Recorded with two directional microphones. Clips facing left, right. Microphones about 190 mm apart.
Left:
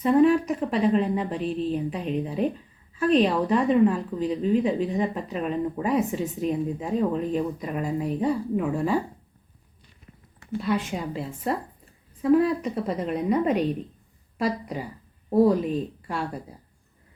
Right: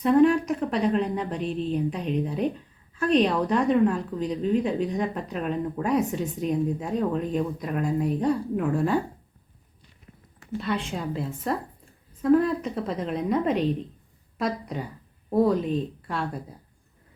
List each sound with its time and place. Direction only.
0.0 s a woman's voice: 5° left (ahead or behind)
10.6 s a woman's voice: 5° left (ahead or behind)